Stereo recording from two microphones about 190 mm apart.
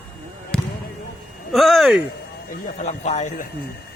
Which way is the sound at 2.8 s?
35° left (ahead or behind).